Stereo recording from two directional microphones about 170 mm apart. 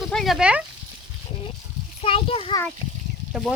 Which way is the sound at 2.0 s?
30° left (ahead or behind).